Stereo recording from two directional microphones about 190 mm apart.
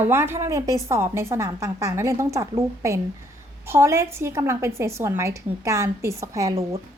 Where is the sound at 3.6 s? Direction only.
15° right (ahead or behind).